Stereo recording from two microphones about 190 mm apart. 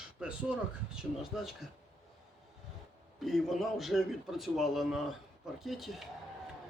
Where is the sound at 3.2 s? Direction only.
Centre (ahead or behind).